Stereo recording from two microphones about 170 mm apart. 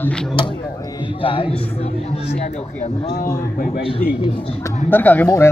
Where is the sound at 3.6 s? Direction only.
55° left (ahead or behind).